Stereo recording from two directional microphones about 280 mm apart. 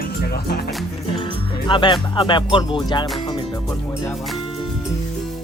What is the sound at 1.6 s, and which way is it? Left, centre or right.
Music, centre.